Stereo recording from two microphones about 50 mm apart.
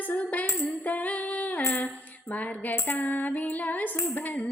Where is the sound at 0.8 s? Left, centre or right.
Left.